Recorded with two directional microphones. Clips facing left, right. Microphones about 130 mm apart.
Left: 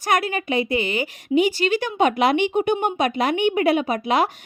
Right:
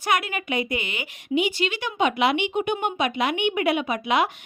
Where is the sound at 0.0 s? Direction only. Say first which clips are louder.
Left 3 dB; 40° left (ahead or behind).